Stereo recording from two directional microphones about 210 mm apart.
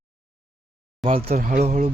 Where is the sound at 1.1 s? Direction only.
40° right (ahead or behind).